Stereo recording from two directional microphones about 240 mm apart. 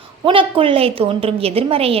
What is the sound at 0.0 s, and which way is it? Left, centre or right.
A woman's voice, right.